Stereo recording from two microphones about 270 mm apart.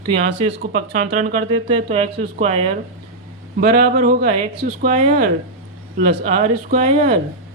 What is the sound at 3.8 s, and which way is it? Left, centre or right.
Speech, right.